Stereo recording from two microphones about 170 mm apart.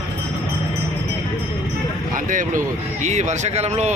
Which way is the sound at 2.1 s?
50° right (ahead or behind).